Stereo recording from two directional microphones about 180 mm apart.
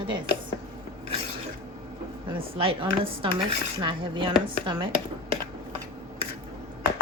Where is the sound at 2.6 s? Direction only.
30° right (ahead or behind).